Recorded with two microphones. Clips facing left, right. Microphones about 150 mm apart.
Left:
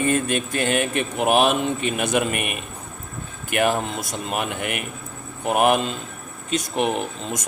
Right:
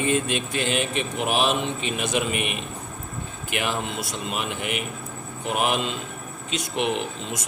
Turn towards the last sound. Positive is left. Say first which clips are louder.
# left 2 dB
turn(degrees=45)  # may be behind; listen again after turning